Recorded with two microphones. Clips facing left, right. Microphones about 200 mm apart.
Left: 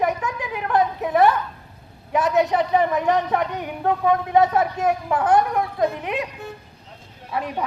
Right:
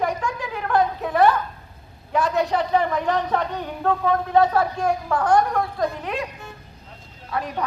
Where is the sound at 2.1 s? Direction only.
20° left (ahead or behind).